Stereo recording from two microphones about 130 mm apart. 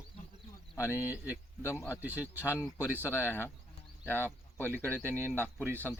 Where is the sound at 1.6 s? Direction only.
20° left (ahead or behind).